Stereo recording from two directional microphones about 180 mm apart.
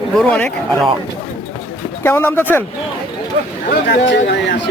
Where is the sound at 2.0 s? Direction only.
10° left (ahead or behind).